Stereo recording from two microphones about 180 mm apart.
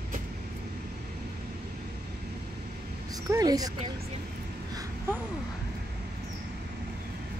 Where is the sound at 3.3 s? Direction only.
20° right (ahead or behind).